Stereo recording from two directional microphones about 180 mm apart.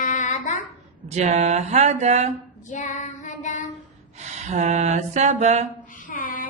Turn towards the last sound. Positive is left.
turn(degrees=50)  # may be behind; listen again after turning